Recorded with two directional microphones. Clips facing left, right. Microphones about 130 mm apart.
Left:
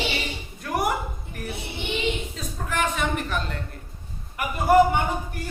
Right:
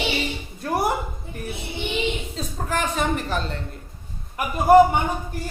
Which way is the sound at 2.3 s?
35° right (ahead or behind).